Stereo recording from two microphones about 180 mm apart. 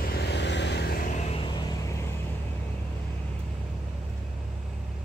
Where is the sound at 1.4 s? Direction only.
20° left (ahead or behind).